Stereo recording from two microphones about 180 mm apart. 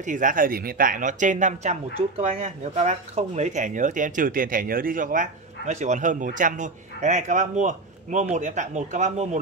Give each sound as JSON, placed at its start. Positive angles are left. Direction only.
{"t": 0.0, "sound": "speech", "side_deg": -45}